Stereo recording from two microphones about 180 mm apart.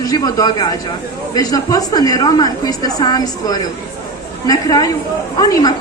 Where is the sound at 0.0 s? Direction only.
20° left (ahead or behind).